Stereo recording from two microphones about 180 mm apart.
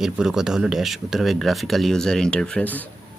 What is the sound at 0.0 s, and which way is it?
Speech, 5° right (ahead or behind).